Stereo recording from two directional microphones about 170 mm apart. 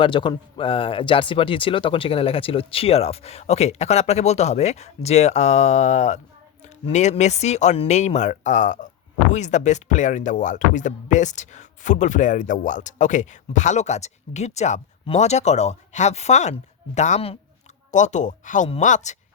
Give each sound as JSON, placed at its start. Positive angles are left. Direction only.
{"t": 0.0, "sound": "speech", "side_deg": 30}